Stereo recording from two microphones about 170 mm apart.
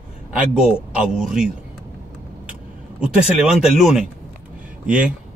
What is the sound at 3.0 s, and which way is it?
Speech, 5° right (ahead or behind).